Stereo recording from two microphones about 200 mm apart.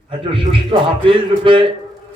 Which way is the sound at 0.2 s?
25° right (ahead or behind).